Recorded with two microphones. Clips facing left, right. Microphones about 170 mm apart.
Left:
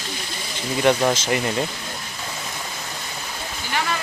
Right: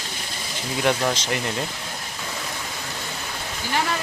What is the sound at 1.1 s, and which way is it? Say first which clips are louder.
Speech: left 4 dB; 5° left (ahead or behind).